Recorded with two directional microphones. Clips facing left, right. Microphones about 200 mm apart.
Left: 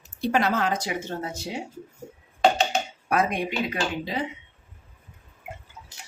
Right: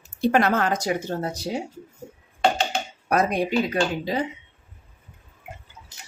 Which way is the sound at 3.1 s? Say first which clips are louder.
Right 3 dB; 40° right (ahead or behind).